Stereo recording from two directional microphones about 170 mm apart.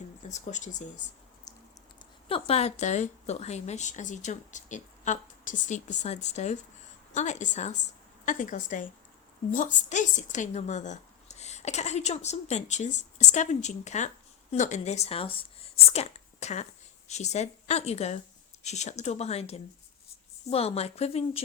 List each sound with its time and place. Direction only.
0.2 s a woman's voice: 45° left (ahead or behind)
1.5 s a sound: 20° left (ahead or behind)
2.0 s a woman's voice: 30° left (ahead or behind)